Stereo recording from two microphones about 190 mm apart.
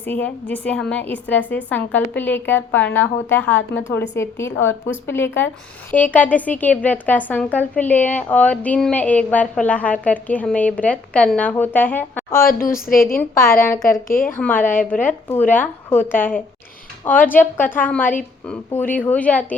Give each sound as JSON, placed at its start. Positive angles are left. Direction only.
{"t": 0.0, "sound": "a woman's voice", "side_deg": 10}
{"t": 12.4, "sound": "a woman's voice", "side_deg": 50}
{"t": 14.3, "sound": "a woman's voice", "side_deg": 10}
{"t": 17.2, "sound": "a woman's voice", "side_deg": 10}